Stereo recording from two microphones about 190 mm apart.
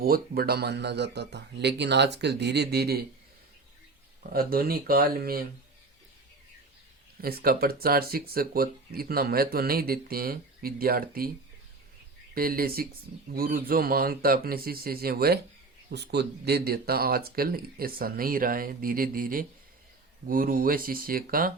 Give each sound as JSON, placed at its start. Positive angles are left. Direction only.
{"t": 0.0, "sound": "a man's voice", "side_deg": -50}
{"t": 4.3, "sound": "speech", "side_deg": -50}
{"t": 7.2, "sound": "speech", "side_deg": -50}
{"t": 12.3, "sound": "speech", "side_deg": -50}